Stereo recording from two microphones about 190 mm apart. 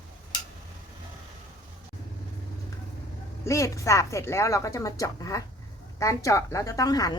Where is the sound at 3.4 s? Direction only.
15° left (ahead or behind).